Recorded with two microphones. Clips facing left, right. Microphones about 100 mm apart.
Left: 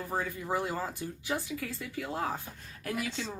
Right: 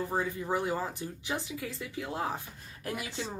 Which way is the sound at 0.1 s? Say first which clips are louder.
Right 1 dB; 20° right (ahead or behind).